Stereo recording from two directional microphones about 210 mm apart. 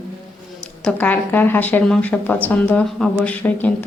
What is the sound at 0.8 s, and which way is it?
A woman's voice, 5° left (ahead or behind).